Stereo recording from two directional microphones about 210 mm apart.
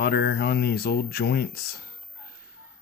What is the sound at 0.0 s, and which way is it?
Speech, 50° left (ahead or behind).